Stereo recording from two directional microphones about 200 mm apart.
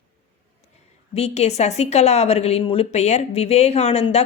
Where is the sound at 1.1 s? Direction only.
30° left (ahead or behind).